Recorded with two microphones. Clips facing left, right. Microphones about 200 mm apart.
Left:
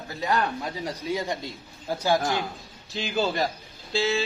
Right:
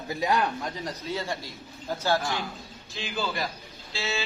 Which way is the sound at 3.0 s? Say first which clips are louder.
Left 5 dB; 40° left (ahead or behind).